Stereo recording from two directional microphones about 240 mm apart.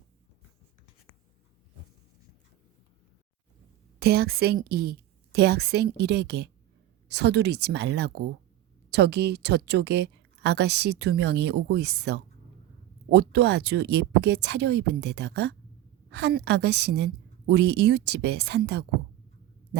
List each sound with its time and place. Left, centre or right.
4.0 s a woman's voice: right